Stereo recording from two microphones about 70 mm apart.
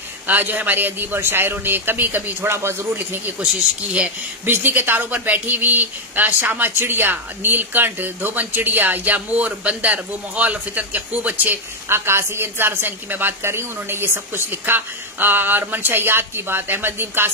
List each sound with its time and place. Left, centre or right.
0.3 s a man's voice: right
4.5 s a woman's voice: right